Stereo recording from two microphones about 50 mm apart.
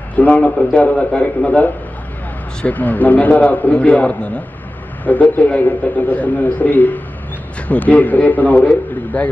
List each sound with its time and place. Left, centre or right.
0.1 s a man's voice: left